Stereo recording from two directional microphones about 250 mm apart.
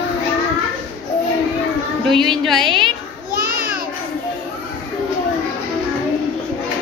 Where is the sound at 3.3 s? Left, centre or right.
Left.